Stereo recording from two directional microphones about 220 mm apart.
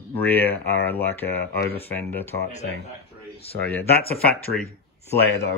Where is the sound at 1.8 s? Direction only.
10° left (ahead or behind).